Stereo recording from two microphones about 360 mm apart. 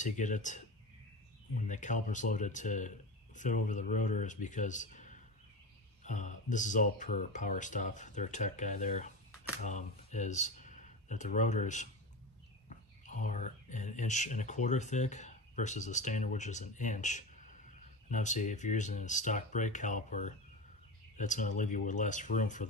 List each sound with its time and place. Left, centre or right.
0.0 s speech: left
1.7 s speech: left
13.0 s speech: left